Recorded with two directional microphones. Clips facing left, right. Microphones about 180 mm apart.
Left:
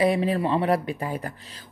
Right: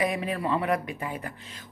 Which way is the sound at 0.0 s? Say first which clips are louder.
Left 6 dB; 30° left (ahead or behind).